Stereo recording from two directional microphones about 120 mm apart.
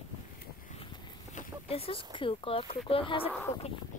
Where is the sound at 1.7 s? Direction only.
50° left (ahead or behind).